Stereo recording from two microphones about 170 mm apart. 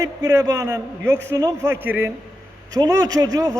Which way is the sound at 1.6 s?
10° right (ahead or behind).